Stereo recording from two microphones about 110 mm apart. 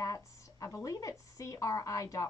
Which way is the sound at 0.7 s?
30° left (ahead or behind).